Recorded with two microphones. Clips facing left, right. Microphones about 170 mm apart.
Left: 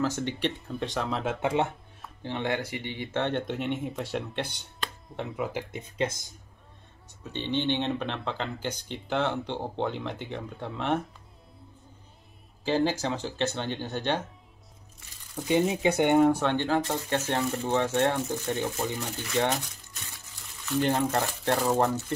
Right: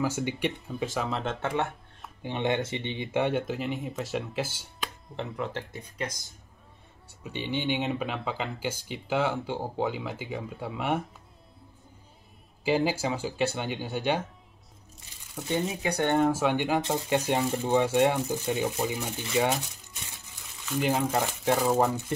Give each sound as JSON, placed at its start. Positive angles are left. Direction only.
{"t": 0.0, "sound": "speech", "side_deg": -10}
{"t": 2.2, "sound": "speech", "side_deg": -20}
{"t": 5.7, "sound": "speech", "side_deg": 25}
{"t": 7.2, "sound": "speech", "side_deg": -10}
{"t": 12.6, "sound": "speech", "side_deg": -10}
{"t": 15.4, "sound": "speech", "side_deg": 20}
{"t": 16.2, "sound": "speech", "side_deg": -5}